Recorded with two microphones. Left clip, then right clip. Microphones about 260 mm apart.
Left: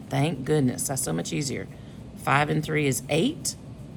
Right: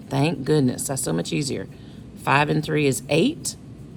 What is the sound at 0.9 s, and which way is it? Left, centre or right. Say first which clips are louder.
Speech: right 4 dB; right.